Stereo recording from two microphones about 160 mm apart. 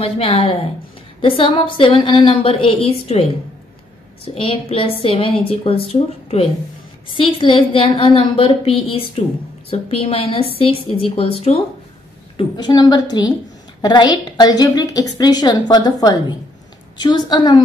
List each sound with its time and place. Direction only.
0.0 s a woman's voice: 40° left (ahead or behind)
7.2 s a woman's voice: 30° left (ahead or behind)
12.4 s a woman's voice: 25° left (ahead or behind)